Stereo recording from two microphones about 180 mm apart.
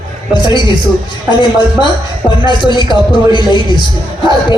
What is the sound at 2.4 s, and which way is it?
Speech, 25° left (ahead or behind).